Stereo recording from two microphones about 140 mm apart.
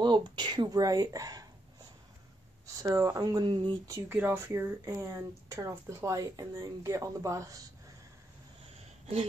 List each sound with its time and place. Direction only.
0.0 s speech: 30° right (ahead or behind)
2.6 s speech: 20° right (ahead or behind)
4.1 s speech: 15° right (ahead or behind)